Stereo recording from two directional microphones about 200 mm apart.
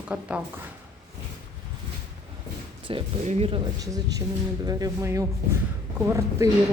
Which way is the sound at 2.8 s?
30° right (ahead or behind).